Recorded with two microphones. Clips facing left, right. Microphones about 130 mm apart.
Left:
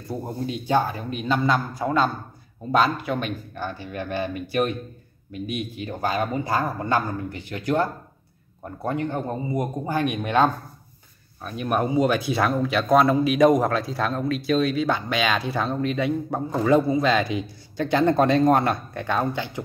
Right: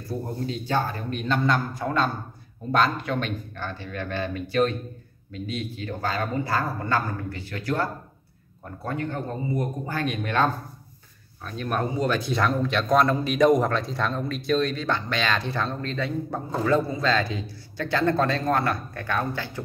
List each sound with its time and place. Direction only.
0.1 s a man's voice: 15° left (ahead or behind)